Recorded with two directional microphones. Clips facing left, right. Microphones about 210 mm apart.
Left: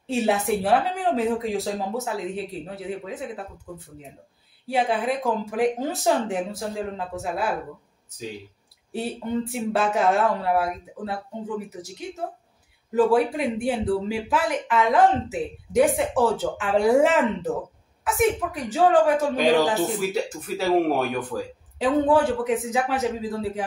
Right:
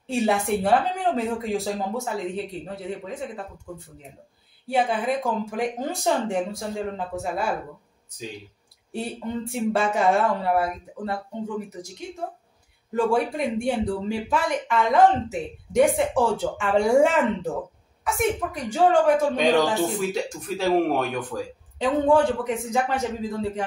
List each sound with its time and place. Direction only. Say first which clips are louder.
0.0 s speech: even; centre (ahead or behind)
4.6 s speech: even; centre (ahead or behind)
9.5 s speech: right 4 dB; centre (ahead or behind)
12.9 s speech: left 3 dB; centre (ahead or behind)
21.7 s speech: even; 5° left (ahead or behind)